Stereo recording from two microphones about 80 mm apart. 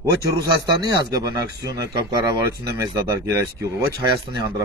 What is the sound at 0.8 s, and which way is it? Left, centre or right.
Speech, right.